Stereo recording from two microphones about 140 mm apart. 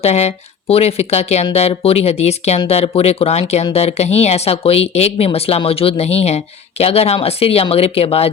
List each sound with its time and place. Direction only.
0.0 s speech: 50° left (ahead or behind)